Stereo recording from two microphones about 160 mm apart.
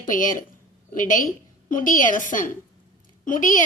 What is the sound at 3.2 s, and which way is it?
Speech, 55° left (ahead or behind).